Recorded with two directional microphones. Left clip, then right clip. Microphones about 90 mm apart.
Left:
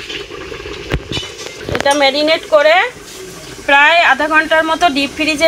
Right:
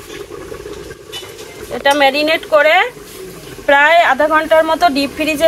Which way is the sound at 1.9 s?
15° right (ahead or behind).